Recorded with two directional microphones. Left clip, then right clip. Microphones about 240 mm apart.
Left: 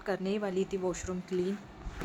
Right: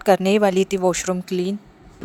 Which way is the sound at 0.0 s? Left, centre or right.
Right.